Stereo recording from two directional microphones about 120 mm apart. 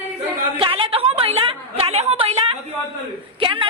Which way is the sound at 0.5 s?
45° right (ahead or behind).